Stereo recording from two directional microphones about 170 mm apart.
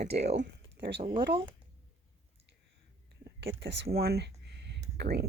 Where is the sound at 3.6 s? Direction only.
80° right.